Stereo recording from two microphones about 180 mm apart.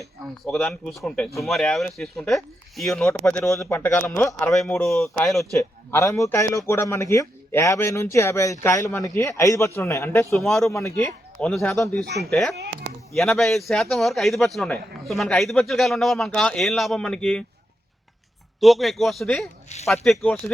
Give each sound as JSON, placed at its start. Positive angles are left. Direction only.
{"t": 0.4, "sound": "a man's voice", "side_deg": 0}
{"t": 3.1, "sound": "a man's voice", "side_deg": 15}
{"t": 5.5, "sound": "speech", "side_deg": 15}
{"t": 10.4, "sound": "a man's voice", "side_deg": 0}
{"t": 10.8, "sound": "speech", "side_deg": 15}
{"t": 11.3, "sound": "a man's voice", "side_deg": 5}
{"t": 18.6, "sound": "a man's voice", "side_deg": 0}
{"t": 19.7, "sound": "speech", "side_deg": 40}
{"t": 20.1, "sound": "speech", "side_deg": 5}